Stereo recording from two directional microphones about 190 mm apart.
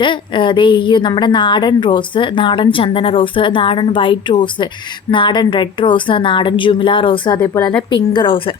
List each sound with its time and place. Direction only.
0.0 s a woman's voice: 25° left (ahead or behind)
7.3 s a woman's voice: 10° left (ahead or behind)
7.9 s a woman's voice: 25° left (ahead or behind)